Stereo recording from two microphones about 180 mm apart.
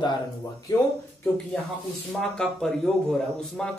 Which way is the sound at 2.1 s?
5° left (ahead or behind).